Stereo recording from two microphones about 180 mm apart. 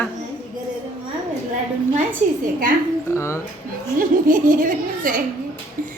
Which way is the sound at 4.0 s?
50° right (ahead or behind).